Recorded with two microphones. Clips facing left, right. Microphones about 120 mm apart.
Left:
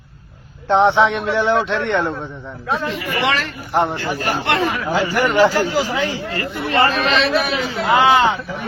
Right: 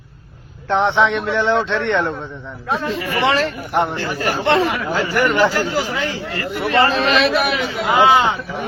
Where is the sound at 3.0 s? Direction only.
30° right (ahead or behind).